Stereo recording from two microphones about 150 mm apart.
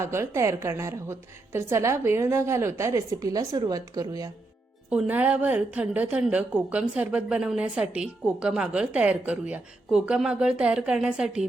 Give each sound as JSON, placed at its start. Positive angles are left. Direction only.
{"t": 0.0, "sound": "a woman's voice", "side_deg": -20}
{"t": 4.9, "sound": "a woman's voice", "side_deg": -10}